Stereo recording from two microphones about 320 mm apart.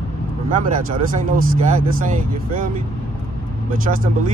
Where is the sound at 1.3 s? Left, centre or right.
Right.